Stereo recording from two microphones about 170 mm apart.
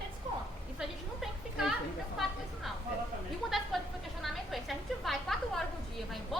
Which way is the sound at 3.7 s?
Centre (ahead or behind).